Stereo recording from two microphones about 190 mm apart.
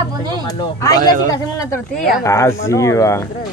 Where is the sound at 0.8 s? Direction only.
20° left (ahead or behind).